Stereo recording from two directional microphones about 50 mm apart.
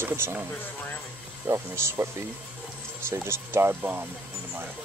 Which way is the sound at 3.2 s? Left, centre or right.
Right.